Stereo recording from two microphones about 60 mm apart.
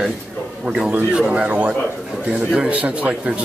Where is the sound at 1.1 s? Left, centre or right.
Centre.